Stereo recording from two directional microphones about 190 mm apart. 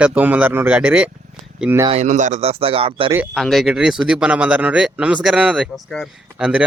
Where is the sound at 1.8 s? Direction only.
35° right (ahead or behind).